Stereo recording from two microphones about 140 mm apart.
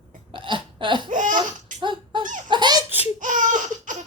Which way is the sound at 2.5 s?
30° right (ahead or behind).